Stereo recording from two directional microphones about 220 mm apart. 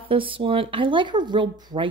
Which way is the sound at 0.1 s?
25° right (ahead or behind).